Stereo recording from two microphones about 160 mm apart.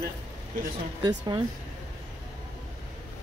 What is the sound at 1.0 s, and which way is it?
Speech, 25° right (ahead or behind).